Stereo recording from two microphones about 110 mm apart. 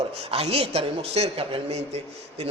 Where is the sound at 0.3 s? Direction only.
60° right (ahead or behind).